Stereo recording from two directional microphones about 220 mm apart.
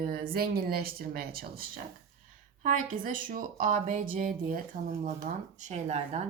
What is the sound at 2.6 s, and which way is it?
A woman's voice, 35° right (ahead or behind).